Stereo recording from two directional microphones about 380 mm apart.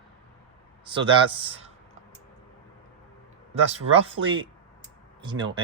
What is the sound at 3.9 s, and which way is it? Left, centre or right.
Speech, centre.